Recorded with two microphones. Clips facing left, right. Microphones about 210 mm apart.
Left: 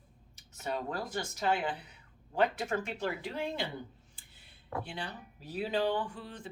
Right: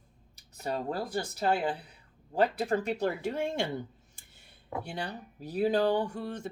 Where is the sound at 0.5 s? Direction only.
35° right (ahead or behind).